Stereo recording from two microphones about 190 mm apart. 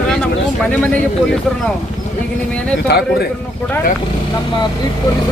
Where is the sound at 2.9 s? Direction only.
60° left (ahead or behind).